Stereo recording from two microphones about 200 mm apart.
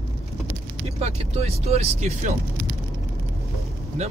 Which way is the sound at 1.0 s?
30° right (ahead or behind).